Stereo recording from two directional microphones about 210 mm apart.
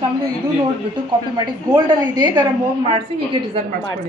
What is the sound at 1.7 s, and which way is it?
Speech, 20° right (ahead or behind).